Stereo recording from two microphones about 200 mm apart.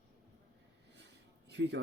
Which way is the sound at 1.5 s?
60° right (ahead or behind).